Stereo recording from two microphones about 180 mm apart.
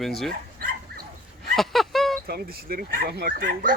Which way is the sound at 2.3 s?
55° right (ahead or behind).